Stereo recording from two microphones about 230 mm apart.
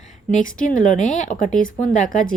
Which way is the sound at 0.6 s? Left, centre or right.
Left.